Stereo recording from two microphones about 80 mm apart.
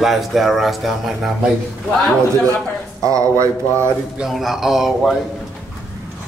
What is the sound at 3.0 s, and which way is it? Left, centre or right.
Speech, right.